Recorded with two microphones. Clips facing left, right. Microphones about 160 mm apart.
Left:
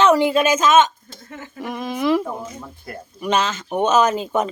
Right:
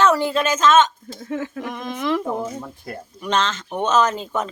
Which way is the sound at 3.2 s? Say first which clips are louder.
Left 2 dB; 10° left (ahead or behind).